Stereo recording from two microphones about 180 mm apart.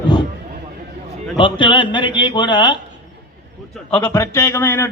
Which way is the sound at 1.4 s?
25° left (ahead or behind).